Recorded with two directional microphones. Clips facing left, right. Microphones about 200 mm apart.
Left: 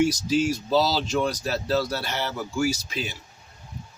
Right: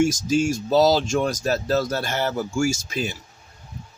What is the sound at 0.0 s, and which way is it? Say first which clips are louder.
Speech: right 2 dB; 45° right (ahead or behind).